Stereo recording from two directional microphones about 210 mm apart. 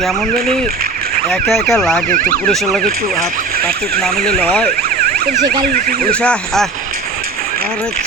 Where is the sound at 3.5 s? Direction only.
45° right (ahead or behind).